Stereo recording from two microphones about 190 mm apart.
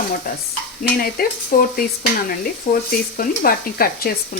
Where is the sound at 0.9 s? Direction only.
50° left (ahead or behind).